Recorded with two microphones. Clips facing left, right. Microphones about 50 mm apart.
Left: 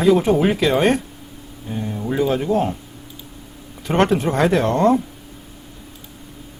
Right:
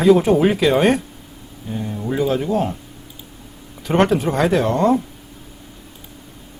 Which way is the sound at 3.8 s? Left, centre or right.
Centre.